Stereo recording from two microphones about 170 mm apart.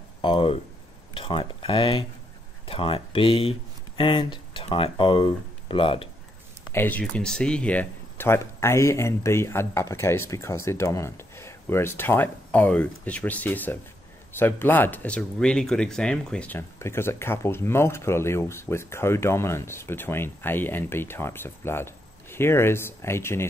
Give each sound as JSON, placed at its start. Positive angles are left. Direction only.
{"t": 0.2, "sound": "speech", "side_deg": 30}
{"t": 6.7, "sound": "speech", "side_deg": 10}